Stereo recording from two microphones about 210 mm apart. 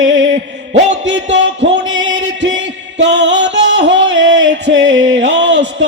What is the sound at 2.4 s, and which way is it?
Music, 60° right (ahead or behind).